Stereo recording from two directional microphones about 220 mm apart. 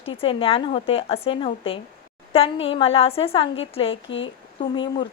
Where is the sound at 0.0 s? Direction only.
25° left (ahead or behind).